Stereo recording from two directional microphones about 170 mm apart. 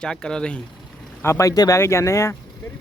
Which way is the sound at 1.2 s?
15° left (ahead or behind).